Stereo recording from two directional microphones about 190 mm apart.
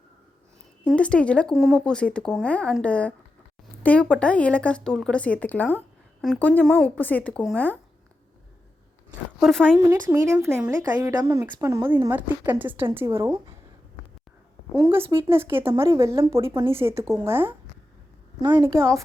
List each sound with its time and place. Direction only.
0.9 s speech: 5° left (ahead or behind)
9.4 s speech: centre (ahead or behind)
9.7 s speech: 15° right (ahead or behind)
14.8 s a woman's voice: 15° right (ahead or behind)